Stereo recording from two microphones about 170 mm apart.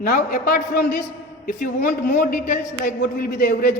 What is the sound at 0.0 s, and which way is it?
A man's voice, 55° left (ahead or behind).